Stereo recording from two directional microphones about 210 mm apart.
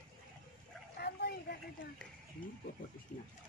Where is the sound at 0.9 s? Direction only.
50° left (ahead or behind).